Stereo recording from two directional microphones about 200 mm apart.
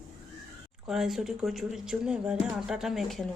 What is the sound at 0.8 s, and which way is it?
Speech, centre (ahead or behind).